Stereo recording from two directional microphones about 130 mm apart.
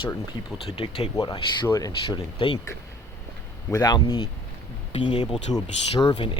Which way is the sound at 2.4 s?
45° left (ahead or behind).